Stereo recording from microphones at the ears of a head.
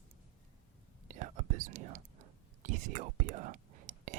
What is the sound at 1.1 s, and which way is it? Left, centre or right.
Whispering, right.